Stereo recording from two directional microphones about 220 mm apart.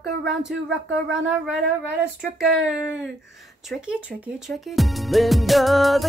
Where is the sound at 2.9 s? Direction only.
Centre (ahead or behind).